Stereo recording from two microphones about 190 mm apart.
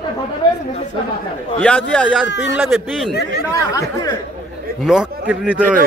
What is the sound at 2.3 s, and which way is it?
Speech, 65° left (ahead or behind).